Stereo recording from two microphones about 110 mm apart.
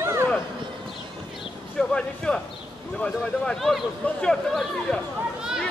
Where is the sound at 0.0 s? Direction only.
25° right (ahead or behind).